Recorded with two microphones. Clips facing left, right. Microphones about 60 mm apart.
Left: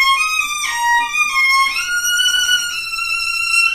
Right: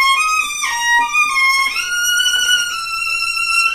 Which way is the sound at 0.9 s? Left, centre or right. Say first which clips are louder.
Right 4 dB; right.